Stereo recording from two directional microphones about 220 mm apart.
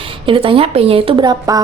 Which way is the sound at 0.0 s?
25° right (ahead or behind).